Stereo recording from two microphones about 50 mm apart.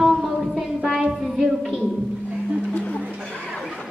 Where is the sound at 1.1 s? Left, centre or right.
Centre.